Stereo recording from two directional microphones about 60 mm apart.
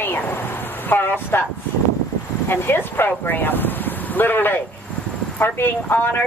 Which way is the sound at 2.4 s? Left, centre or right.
Left.